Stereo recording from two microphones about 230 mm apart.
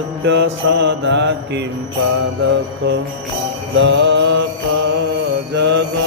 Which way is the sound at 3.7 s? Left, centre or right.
Right.